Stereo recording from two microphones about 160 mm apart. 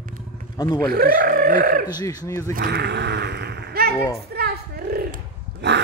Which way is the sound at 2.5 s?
90° right.